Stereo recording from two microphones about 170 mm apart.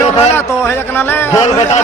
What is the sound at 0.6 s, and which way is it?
Speech, 10° left (ahead or behind).